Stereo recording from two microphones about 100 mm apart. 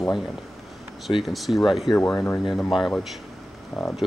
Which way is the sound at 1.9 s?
15° left (ahead or behind).